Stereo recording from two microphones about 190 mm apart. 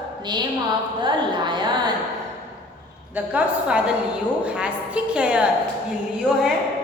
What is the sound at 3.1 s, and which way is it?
A woman's voice, 10° right (ahead or behind).